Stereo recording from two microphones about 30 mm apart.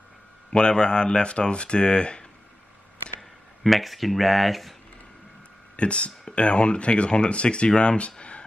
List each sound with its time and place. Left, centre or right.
0.5 s speech: left
3.2 s speech: centre
5.8 s speech: left